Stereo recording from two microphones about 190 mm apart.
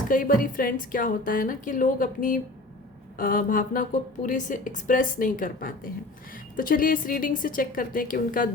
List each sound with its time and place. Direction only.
0.1 s a woman's voice: 45° left (ahead or behind)